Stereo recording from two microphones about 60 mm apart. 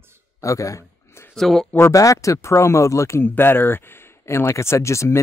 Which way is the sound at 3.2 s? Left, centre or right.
Left.